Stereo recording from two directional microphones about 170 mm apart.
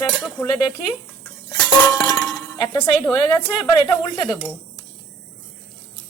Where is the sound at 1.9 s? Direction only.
20° left (ahead or behind).